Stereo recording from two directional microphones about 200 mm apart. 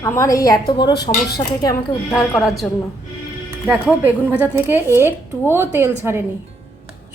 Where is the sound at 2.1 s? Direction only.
Centre (ahead or behind).